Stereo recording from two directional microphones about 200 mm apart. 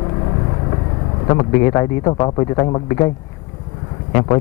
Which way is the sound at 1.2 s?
20° left (ahead or behind).